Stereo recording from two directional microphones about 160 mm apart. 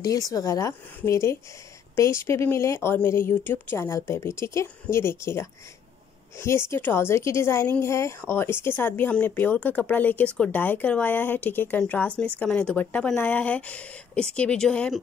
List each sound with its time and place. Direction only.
0.3 s a woman's voice: 20° left (ahead or behind); by 15.0 s 5° left (ahead or behind)